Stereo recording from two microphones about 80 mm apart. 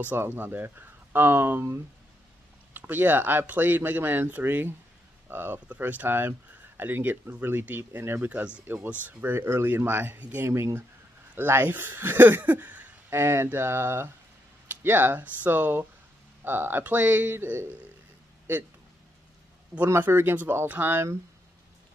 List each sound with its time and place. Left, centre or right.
0.0 s speech: right
10.5 s speech: right
19.9 s speech: right